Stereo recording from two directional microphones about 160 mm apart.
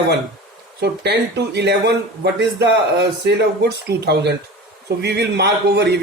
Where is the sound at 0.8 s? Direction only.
90° right.